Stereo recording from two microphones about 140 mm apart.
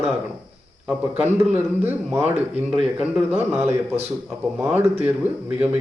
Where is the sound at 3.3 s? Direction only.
15° right (ahead or behind).